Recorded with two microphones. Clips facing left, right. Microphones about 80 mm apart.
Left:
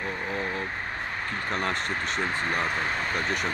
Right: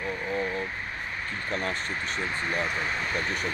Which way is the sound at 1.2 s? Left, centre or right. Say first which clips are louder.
Left 2 dB; left.